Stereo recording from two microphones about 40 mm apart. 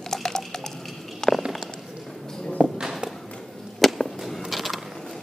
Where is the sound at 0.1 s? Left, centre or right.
Centre.